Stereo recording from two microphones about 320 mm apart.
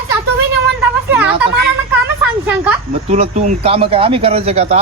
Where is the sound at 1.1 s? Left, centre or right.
Centre.